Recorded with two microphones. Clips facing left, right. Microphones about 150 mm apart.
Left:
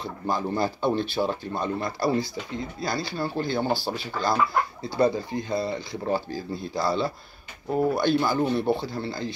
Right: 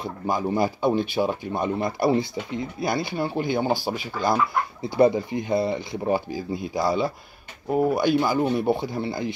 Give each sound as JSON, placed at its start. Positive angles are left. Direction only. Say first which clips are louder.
{"t": 0.0, "sound": "speech", "louder": "right 2 dB", "side_deg": -15}